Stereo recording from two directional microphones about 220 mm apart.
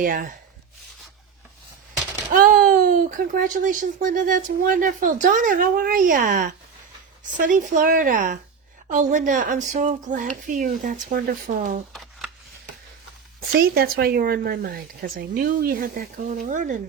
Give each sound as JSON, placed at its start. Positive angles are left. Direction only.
{"t": 0.0, "sound": "speech", "side_deg": -40}
{"t": 2.3, "sound": "speech", "side_deg": -40}
{"t": 13.5, "sound": "speech", "side_deg": -45}